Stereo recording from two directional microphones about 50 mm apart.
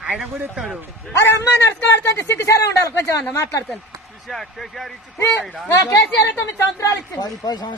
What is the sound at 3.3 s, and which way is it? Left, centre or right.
Speech, left.